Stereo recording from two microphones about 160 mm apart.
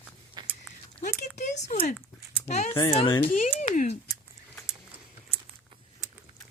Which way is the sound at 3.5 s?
50° left (ahead or behind).